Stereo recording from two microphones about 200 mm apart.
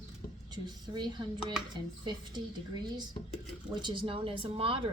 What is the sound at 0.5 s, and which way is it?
Speech, 20° right (ahead or behind).